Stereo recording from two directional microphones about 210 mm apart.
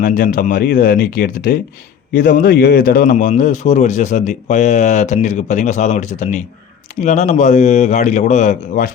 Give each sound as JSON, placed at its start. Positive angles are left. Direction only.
{"t": 0.0, "sound": "speech", "side_deg": 40}